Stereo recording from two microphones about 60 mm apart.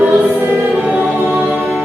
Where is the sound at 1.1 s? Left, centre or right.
Right.